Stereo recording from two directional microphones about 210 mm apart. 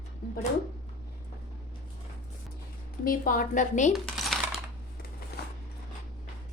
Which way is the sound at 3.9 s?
Centre (ahead or behind).